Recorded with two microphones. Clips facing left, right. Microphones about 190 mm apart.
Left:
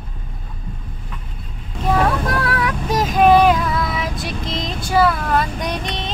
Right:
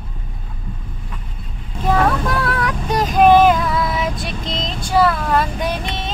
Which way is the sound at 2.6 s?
Centre (ahead or behind).